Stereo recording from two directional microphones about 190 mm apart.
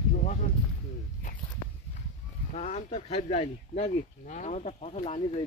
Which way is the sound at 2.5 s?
35° left (ahead or behind).